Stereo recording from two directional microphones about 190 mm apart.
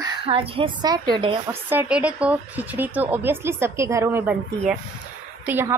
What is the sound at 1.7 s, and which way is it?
A woman's voice, 10° right (ahead or behind).